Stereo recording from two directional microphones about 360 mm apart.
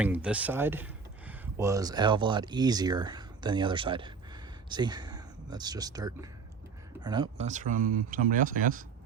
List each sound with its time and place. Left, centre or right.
0.0 s speech: centre; by 8.8 s right